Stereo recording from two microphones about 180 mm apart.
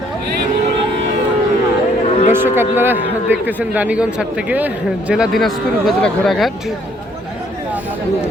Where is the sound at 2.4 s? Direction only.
15° right (ahead or behind).